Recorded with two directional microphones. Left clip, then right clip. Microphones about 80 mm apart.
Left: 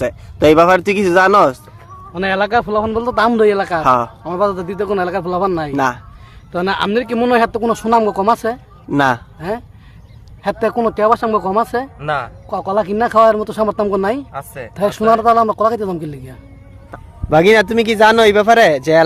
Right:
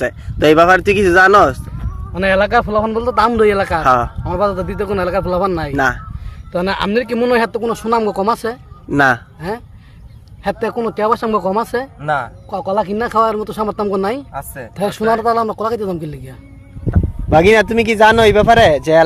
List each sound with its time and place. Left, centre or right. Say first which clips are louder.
0.0 s speech: left 1 dB; centre
2.1 s a man's voice: right 2 dB; centre
3.8 s speech: even; centre
4.2 s a man's voice: even; left
5.7 s speech: right 1 dB; centre
6.5 s a man's voice: even; left
7.5 s speech: left 2 dB; left
7.9 s a man's voice: left 2 dB; left
8.9 s speech: right 2 dB; centre
9.4 s a man's voice: left 1 dB; left
10.6 s speech: left 5 dB; left
11.1 s speech: left 1 dB; centre
12.5 s speech: left 1 dB; left
13.7 s a man's voice: left 1 dB; left